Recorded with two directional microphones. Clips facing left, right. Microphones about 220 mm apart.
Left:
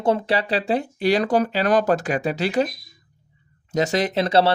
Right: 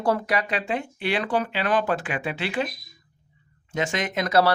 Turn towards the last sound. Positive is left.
turn(degrees=30)  # may be behind; listen again after turning